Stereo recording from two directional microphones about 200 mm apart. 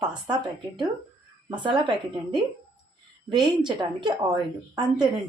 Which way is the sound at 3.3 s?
20° right (ahead or behind).